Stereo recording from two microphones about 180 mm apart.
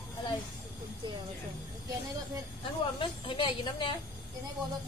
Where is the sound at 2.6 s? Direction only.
30° left (ahead or behind).